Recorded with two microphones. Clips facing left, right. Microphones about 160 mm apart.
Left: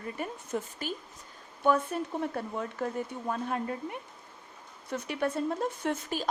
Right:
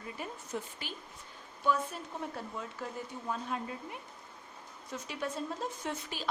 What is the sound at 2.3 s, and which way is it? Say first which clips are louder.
A woman's voice: left 7 dB; 55° left (ahead or behind).